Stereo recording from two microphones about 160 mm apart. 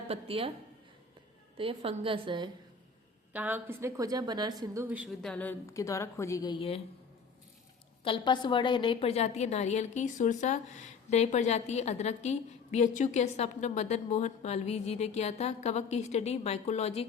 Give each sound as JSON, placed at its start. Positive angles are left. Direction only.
{"t": 0.1, "sound": "a woman's voice", "side_deg": -35}
{"t": 1.5, "sound": "a woman's voice", "side_deg": -35}
{"t": 3.3, "sound": "a woman's voice", "side_deg": -10}
{"t": 5.2, "sound": "a woman's voice", "side_deg": 10}
{"t": 5.7, "sound": "a woman's voice", "side_deg": 20}
{"t": 6.6, "sound": "speech", "side_deg": 35}
{"t": 8.0, "sound": "a woman's voice", "side_deg": 30}